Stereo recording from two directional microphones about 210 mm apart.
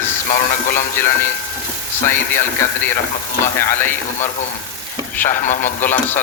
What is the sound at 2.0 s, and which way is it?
Speech, 10° left (ahead or behind).